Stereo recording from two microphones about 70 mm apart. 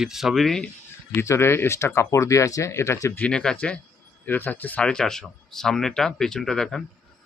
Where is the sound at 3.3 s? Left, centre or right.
Centre.